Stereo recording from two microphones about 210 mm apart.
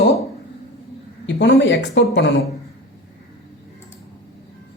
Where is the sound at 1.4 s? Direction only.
55° left (ahead or behind).